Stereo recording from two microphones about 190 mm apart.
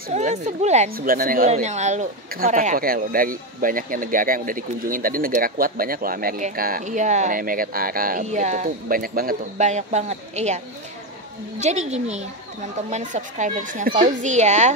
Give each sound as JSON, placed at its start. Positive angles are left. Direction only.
{"t": 0.1, "sound": "speech", "side_deg": -35}
{"t": 0.9, "sound": "speech", "side_deg": -50}
{"t": 1.5, "sound": "speech", "side_deg": -35}
{"t": 11.6, "sound": "speech", "side_deg": -35}